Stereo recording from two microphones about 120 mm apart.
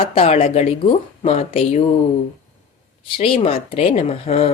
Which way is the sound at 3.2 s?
50° left (ahead or behind).